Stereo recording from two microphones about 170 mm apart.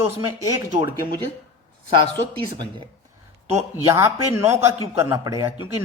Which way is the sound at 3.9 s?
15° right (ahead or behind).